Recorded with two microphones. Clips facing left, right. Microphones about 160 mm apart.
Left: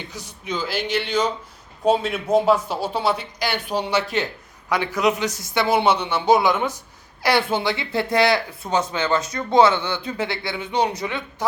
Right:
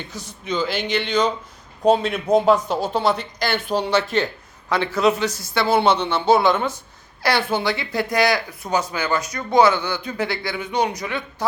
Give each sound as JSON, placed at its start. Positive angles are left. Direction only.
{"t": 0.1, "sound": "a man's voice", "side_deg": 15}